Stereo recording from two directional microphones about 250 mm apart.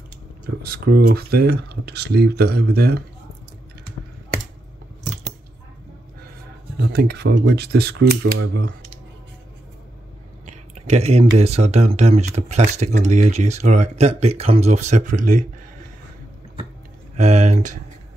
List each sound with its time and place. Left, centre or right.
0.6 s speech: right
6.8 s speech: right
10.4 s speech: right
17.2 s speech: right